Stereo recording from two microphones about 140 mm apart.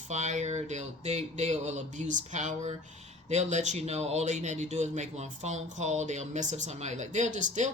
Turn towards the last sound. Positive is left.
turn(degrees=-60)  # may be behind; listen again after turning